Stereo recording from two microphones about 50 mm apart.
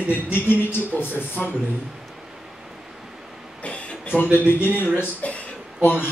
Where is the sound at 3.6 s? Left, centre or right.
Left.